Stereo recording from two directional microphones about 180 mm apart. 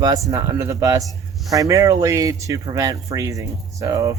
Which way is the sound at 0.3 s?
20° right (ahead or behind).